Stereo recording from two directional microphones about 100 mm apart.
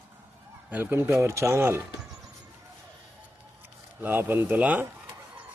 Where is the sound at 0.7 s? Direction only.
25° right (ahead or behind).